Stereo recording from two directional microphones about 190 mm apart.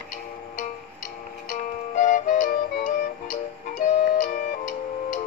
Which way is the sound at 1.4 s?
45° left (ahead or behind).